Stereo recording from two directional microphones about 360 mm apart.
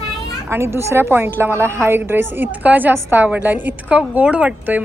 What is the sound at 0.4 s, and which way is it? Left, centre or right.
A woman's voice, centre.